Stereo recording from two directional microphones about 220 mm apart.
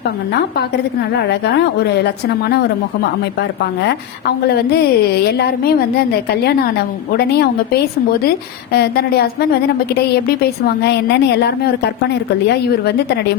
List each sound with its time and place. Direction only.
1.3 s a woman's voice: 50° left (ahead or behind)